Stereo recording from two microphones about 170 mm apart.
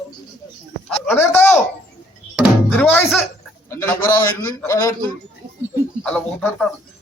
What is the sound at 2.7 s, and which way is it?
A man's voice, 10° left (ahead or behind).